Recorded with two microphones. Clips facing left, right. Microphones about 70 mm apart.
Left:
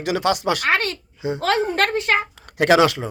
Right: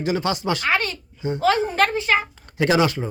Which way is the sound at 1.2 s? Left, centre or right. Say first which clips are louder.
Even; left.